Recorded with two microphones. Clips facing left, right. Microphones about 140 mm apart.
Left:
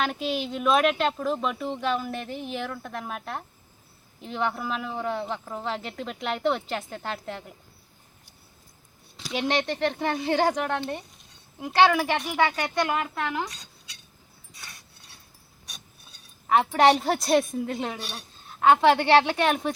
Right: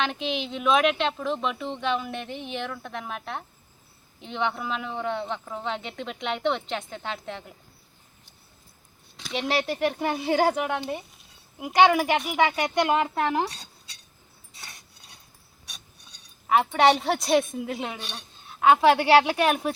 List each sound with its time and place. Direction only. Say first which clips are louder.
0.0 s speech: left 1 dB; 5° left (ahead or behind)
9.1 s speech: left 1 dB; centre (ahead or behind); by 13.9 s 35° right (ahead or behind)
14.5 s rub: right 1 dB; 25° right (ahead or behind)
15.6 s a sound: left 1 dB; 5° left (ahead or behind)
17.6 s speech: left 2 dB; centre (ahead or behind)
18.0 s a woman's voice: left 1 dB; 10° left (ahead or behind)
18.4 s speech: even; 5° right (ahead or behind)